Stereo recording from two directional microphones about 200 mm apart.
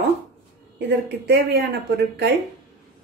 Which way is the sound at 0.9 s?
60° right (ahead or behind).